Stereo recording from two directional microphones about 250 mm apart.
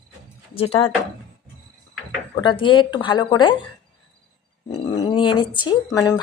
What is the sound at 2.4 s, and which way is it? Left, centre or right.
A woman's voice, centre.